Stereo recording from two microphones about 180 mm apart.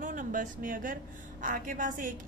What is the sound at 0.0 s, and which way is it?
A woman's voice, 50° right (ahead or behind).